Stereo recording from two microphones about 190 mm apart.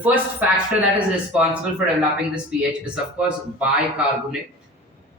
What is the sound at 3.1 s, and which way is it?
Speech, 5° right (ahead or behind).